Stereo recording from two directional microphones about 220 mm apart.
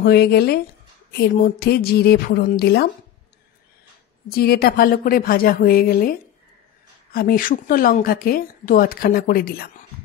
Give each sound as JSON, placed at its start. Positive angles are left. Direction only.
{"t": 0.0, "sound": "a woman's voice", "side_deg": 45}
{"t": 4.3, "sound": "a woman's voice", "side_deg": 45}